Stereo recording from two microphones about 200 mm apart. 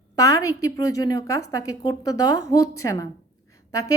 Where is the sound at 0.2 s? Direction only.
15° left (ahead or behind).